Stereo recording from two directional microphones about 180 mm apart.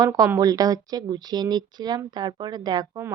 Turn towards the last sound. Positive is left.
turn(degrees=-20)  # may be behind; listen again after turning